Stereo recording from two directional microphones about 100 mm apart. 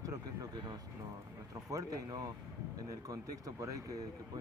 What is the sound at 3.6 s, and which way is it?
Speech, 35° right (ahead or behind).